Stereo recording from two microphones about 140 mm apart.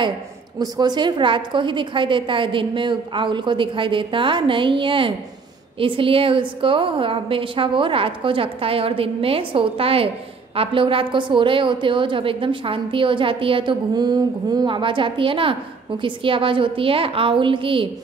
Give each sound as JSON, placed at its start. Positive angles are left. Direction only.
{"t": 0.6, "sound": "a woman's voice", "side_deg": -30}